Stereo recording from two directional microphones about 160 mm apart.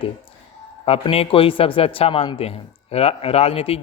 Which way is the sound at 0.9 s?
35° left (ahead or behind).